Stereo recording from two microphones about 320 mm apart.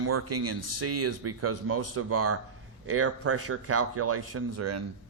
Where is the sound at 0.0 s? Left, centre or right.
Right.